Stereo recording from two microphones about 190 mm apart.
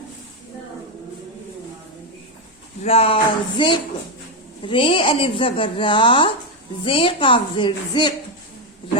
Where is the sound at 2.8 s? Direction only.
30° left (ahead or behind).